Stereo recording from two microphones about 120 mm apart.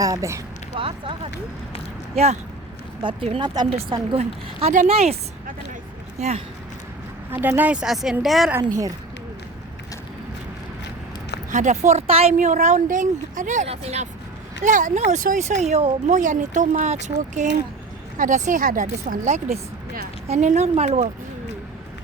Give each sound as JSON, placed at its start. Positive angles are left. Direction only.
{"t": 0.0, "sound": "speech", "side_deg": -25}
{"t": 0.8, "sound": "speech", "side_deg": -45}
{"t": 2.1, "sound": "speech", "side_deg": -65}
{"t": 3.0, "sound": "a woman's voice", "side_deg": -40}
{"t": 4.2, "sound": "speech", "side_deg": -75}
{"t": 6.1, "sound": "speech", "side_deg": -65}
{"t": 7.3, "sound": "a woman's voice", "side_deg": -15}
{"t": 11.5, "sound": "speech", "side_deg": -90}
{"t": 12.0, "sound": "speech", "side_deg": -55}
{"t": 13.7, "sound": "speech", "side_deg": -65}
{"t": 14.6, "sound": "a woman's voice", "side_deg": -90}